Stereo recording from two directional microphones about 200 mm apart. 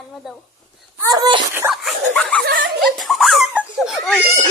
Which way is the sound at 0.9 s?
15° right (ahead or behind).